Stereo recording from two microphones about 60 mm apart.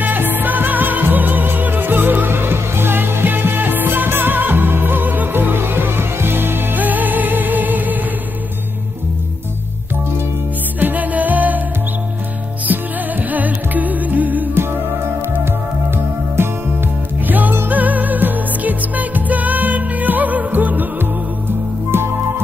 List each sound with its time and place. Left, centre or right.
0.0 s music: right
10.8 s music: right
12.7 s music: right
17.3 s music: right